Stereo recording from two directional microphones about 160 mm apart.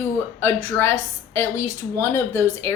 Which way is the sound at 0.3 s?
15° left (ahead or behind).